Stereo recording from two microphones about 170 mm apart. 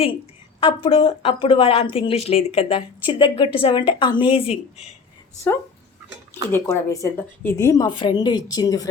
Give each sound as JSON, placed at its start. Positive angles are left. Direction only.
{"t": 0.6, "sound": "speech", "side_deg": 30}
{"t": 6.5, "sound": "a woman's voice", "side_deg": 15}